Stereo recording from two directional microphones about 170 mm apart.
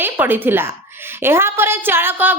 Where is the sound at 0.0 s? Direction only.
10° right (ahead or behind).